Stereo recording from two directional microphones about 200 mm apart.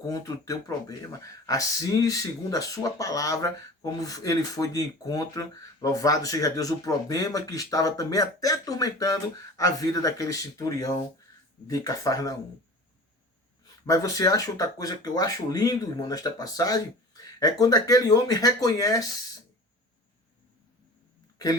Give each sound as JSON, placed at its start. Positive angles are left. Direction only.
{"t": 0.0, "sound": "speech", "side_deg": 15}
{"t": 13.8, "sound": "speech", "side_deg": 15}